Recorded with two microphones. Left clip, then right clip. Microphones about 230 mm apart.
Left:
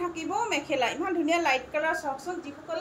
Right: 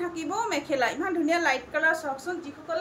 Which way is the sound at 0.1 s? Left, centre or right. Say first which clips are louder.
Even; centre.